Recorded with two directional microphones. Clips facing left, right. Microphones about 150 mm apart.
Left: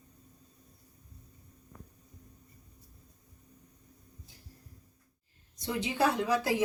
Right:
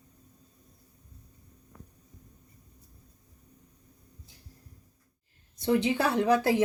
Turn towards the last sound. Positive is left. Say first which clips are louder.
# right 3 dB
turn(degrees=-60)  # may be behind; listen again after turning